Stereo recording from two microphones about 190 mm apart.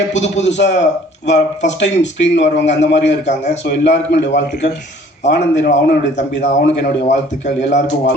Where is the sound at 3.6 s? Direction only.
65° left (ahead or behind).